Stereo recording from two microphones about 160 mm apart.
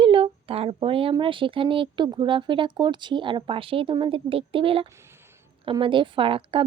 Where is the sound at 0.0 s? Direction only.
35° right (ahead or behind).